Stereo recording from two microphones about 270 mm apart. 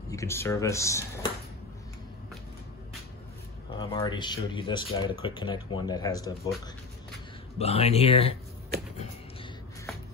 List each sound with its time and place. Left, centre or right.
0.1 s speech: centre
3.8 s speech: centre
7.5 s speech: left